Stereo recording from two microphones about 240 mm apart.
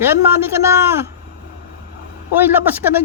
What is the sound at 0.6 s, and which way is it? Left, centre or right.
Speech, centre.